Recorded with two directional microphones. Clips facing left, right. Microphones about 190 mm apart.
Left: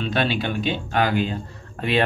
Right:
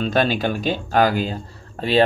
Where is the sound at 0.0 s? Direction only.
40° right (ahead or behind).